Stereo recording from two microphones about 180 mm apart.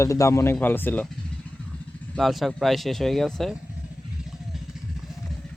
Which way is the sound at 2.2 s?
Centre (ahead or behind).